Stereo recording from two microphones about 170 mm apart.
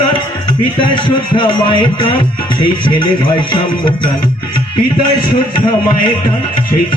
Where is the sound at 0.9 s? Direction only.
30° left (ahead or behind).